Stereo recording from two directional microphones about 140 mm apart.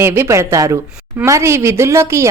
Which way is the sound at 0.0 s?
20° right (ahead or behind).